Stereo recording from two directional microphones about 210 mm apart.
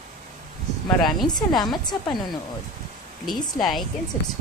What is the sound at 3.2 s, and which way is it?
Speech, centre (ahead or behind).